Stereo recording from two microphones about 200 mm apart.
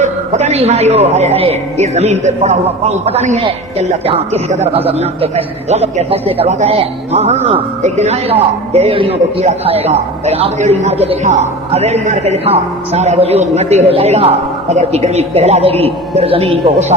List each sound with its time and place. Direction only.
0.0 s a man's voice: 35° right (ahead or behind)